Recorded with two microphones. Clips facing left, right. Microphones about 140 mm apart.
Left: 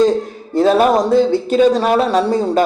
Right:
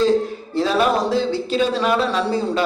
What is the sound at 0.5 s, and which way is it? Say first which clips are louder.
A man's voice: left 6 dB; 50° left (ahead or behind).